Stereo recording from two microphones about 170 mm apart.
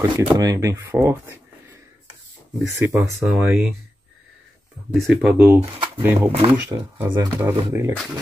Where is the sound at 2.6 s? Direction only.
15° right (ahead or behind).